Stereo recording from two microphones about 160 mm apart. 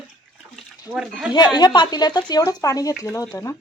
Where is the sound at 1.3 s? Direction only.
25° left (ahead or behind).